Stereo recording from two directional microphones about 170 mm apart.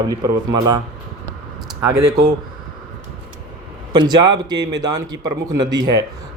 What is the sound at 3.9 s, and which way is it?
Speech, 25° right (ahead or behind).